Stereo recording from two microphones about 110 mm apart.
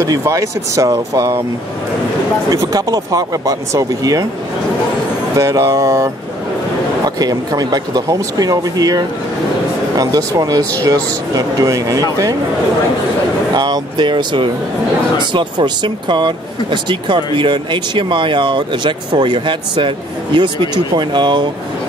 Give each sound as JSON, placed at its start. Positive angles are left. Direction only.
{"t": 0.0, "sound": "speech", "side_deg": -30}
{"t": 2.5, "sound": "speech", "side_deg": -35}
{"t": 5.3, "sound": "speech", "side_deg": -30}
{"t": 7.2, "sound": "speech", "side_deg": -35}
{"t": 13.6, "sound": "speech", "side_deg": -45}